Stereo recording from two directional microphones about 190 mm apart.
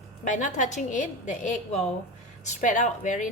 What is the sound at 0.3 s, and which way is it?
A woman's voice, 40° left (ahead or behind).